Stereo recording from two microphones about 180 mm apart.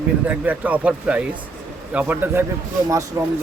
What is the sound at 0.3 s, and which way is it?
Speech, 10° right (ahead or behind).